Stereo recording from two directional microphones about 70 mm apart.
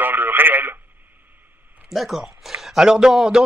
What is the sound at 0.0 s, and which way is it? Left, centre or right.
Radio, right.